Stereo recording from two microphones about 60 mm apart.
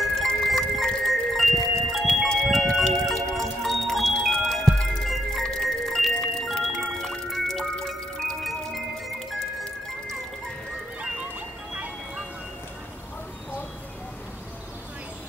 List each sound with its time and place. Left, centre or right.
0.5 s music: centre
11.0 s music: centre